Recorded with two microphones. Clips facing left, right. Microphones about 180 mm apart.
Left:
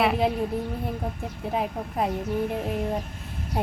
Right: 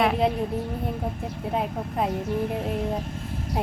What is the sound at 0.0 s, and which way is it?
Speech, centre (ahead or behind).